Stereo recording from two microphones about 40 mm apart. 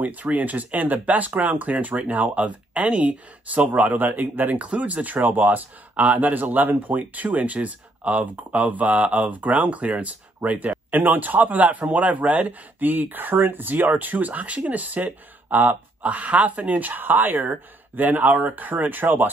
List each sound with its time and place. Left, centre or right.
0.0 s speech: right
3.7 s speech: right
4.6 s speech: right
16.0 s speech: right